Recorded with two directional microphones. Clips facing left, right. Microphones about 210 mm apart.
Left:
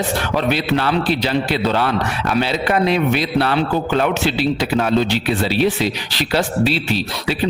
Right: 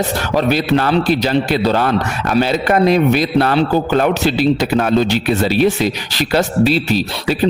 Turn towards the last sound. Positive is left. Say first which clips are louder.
# right 4 dB
turn(degrees=-40)  # may be behind; listen again after turning